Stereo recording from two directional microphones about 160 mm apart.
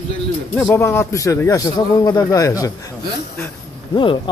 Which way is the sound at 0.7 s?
15° left (ahead or behind).